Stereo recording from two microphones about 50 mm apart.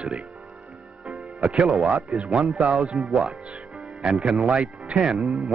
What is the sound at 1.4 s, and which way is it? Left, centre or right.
Speech, centre.